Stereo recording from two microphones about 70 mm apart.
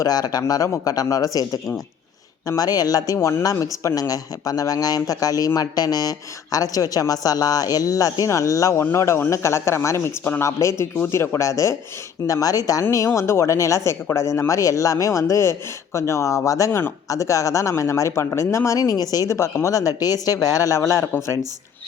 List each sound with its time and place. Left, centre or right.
0.0 s speech: left
2.6 s speech: left
3.2 s speech: left
3.4 s speech: left
5.5 s speech: left
8.8 s speech: left
10.4 s speech: left
12.2 s speech: left
13.1 s speech: left
19.3 s speech: left